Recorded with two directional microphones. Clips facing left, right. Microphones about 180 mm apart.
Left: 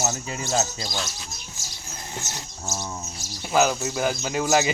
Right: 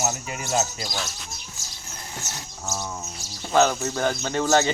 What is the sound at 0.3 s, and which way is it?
Speech, 30° left (ahead or behind).